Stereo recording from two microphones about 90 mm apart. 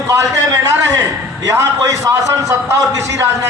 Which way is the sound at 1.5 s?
35° right (ahead or behind).